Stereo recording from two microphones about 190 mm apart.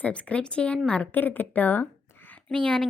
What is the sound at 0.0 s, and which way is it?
A woman's voice, 5° left (ahead or behind).